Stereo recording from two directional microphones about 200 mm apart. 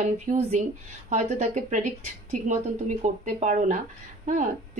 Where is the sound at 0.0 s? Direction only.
35° right (ahead or behind).